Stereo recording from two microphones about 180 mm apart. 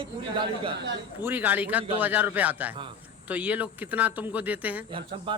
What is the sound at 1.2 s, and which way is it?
Speech, 10° right (ahead or behind).